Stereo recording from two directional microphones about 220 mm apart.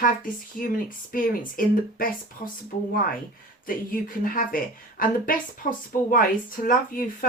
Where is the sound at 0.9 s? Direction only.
40° left (ahead or behind).